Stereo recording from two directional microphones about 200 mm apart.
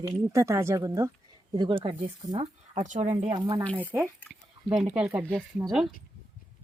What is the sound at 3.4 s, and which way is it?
Speech, 20° right (ahead or behind).